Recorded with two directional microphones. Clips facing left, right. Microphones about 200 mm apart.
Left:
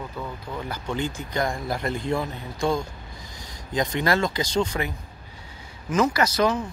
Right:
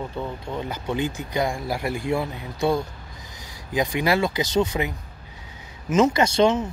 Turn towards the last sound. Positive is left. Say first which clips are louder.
# right 3 dB
turn(degrees=-25)  # may be behind; listen again after turning